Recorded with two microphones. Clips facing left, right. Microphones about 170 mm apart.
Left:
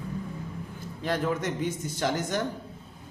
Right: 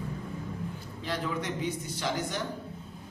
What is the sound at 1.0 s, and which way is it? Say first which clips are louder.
A man's voice: left 5 dB; 50° left (ahead or behind).